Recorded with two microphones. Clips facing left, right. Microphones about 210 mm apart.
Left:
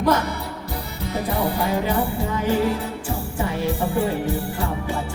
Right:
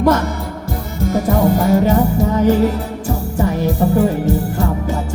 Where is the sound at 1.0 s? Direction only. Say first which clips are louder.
Right 9 dB; 45° right (ahead or behind).